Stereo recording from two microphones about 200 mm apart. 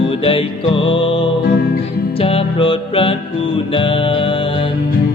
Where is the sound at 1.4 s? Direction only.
50° left (ahead or behind).